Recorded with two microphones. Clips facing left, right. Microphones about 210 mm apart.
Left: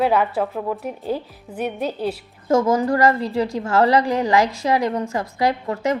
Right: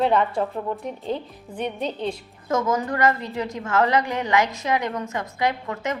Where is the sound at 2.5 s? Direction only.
30° left (ahead or behind).